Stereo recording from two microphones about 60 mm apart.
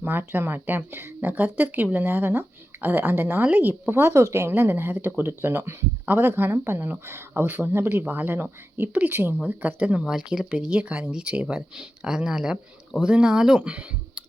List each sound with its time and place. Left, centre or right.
0.0 s speech: right
4.0 s speech: right
10.0 s speech: centre